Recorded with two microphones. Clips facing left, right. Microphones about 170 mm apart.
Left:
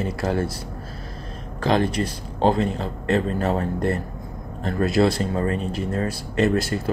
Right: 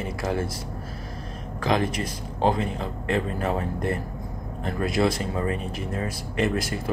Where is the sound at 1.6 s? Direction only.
30° left (ahead or behind).